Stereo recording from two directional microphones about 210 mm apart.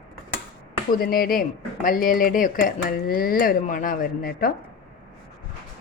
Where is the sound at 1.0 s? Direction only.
45° left (ahead or behind).